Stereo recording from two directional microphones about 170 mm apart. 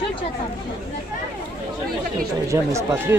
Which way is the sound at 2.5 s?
15° right (ahead or behind).